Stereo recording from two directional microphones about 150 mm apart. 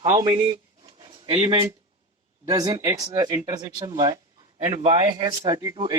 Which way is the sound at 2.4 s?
25° right (ahead or behind).